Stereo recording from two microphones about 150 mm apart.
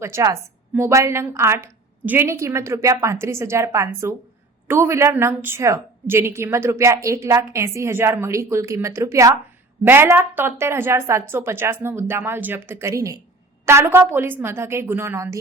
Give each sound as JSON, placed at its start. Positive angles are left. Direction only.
{"t": 0.0, "sound": "a woman's voice", "side_deg": -20}